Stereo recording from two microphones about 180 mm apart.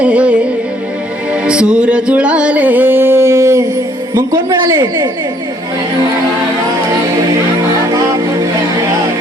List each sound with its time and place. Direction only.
0.0 s music: 5° right (ahead or behind)